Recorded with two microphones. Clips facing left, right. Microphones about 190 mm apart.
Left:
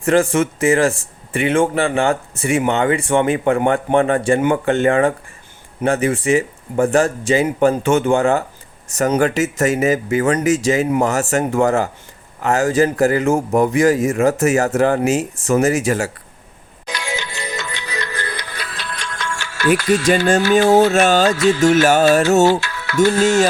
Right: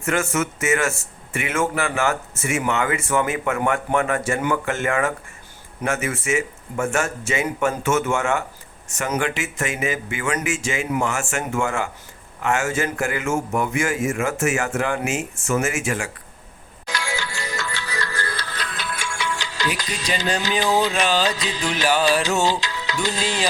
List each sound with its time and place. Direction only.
0.0 s a man's voice: 35° left (ahead or behind)
16.8 s music: 20° left (ahead or behind); by 19.6 s 15° right (ahead or behind)
19.9 s music: 50° left (ahead or behind)
22.6 s music: 15° right (ahead or behind)
23.2 s music: 45° left (ahead or behind)